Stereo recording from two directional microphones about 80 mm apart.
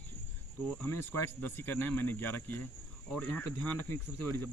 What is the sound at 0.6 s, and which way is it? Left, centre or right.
Speech, left.